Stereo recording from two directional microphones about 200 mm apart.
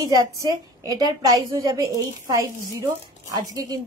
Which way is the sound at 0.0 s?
15° right (ahead or behind).